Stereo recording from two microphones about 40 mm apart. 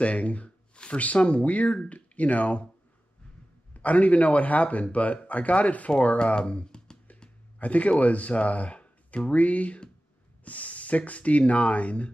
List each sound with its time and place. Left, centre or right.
0.0 s speech: left
3.7 s speech: left
7.5 s speech: left